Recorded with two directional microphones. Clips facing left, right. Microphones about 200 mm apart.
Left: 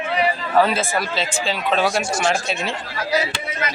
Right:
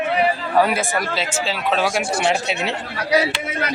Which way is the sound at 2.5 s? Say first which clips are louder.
Right 1 dB; 65° right (ahead or behind).